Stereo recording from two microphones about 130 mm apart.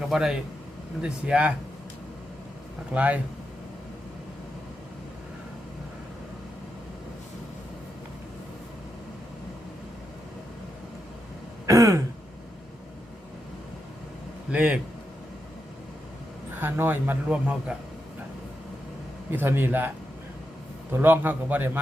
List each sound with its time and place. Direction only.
0.1 s speech: 5° right (ahead or behind)
2.9 s speech: 10° right (ahead or behind)
11.6 s throat clearing: 25° right (ahead or behind)
14.5 s speech: 10° right (ahead or behind)
16.6 s speech: 15° right (ahead or behind)
19.3 s speech: 15° right (ahead or behind)
20.9 s speech: 15° right (ahead or behind)